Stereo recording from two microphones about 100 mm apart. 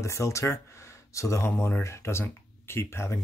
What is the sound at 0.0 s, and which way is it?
Speech, 30° left (ahead or behind).